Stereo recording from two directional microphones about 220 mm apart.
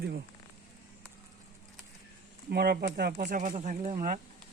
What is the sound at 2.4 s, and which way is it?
Speech, 45° right (ahead or behind).